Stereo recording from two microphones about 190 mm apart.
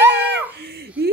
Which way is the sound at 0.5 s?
60° right (ahead or behind).